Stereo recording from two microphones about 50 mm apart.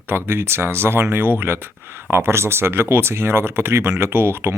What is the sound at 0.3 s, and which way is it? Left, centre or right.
Speech, right.